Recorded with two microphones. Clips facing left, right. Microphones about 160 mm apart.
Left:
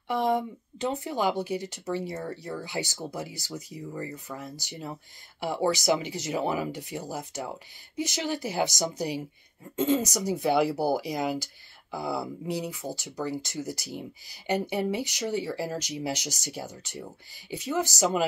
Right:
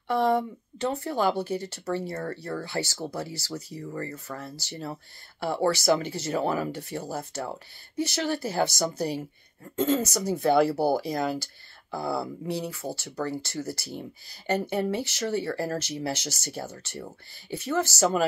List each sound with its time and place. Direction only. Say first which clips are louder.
0.1 s speech: right 2 dB; 15° left (ahead or behind)